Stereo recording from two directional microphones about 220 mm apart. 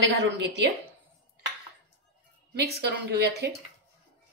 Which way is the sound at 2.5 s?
45° right (ahead or behind).